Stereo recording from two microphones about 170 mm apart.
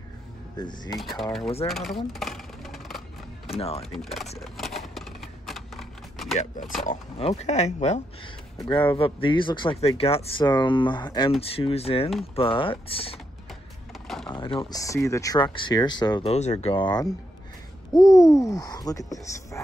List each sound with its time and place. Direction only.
0.6 s speech: 25° left (ahead or behind)
0.9 s speech: centre (ahead or behind)
2.1 s music: centre (ahead or behind)
3.4 s speech: 35° left (ahead or behind)
3.9 s speech: centre (ahead or behind)
4.4 s typewriter: centre (ahead or behind)
7.2 s speech: 40° left (ahead or behind)
8.5 s speech: 25° left (ahead or behind)
14.2 s speech: 30° left (ahead or behind)
14.8 s speech: 20° left (ahead or behind)
16.3 s speech: 40° left (ahead or behind)
16.7 s speech: 25° left (ahead or behind)
17.9 s speech: centre (ahead or behind)
18.2 s speech: 20° left (ahead or behind)